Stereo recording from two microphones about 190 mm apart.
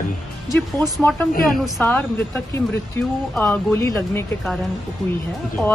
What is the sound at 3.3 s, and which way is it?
Speech, 10° left (ahead or behind).